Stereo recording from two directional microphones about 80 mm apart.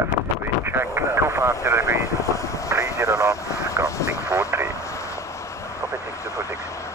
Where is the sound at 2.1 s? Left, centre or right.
Left.